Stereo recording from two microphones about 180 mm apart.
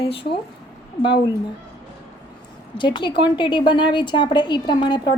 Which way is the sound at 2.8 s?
25° left (ahead or behind).